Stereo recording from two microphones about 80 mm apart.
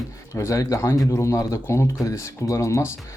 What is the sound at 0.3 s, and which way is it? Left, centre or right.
Speech, left.